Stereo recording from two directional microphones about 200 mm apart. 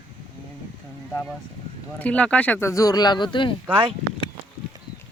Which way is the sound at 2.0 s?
5° left (ahead or behind).